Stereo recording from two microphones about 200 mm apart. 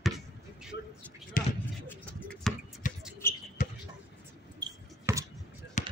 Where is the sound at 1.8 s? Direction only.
10° left (ahead or behind).